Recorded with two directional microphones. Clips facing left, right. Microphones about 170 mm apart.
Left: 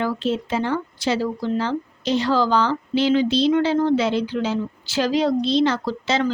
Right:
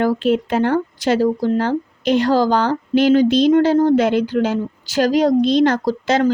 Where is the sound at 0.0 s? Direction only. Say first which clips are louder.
Right 6 dB; 50° right (ahead or behind).